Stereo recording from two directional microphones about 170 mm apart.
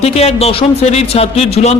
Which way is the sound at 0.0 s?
40° left (ahead or behind).